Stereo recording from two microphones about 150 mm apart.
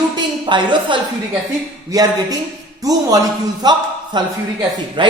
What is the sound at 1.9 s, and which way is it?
Speech, 25° right (ahead or behind).